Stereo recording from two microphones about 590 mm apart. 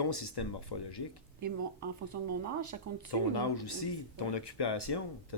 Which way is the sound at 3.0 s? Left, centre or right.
Left.